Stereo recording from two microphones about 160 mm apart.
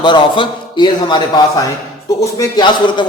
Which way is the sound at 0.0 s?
30° left (ahead or behind).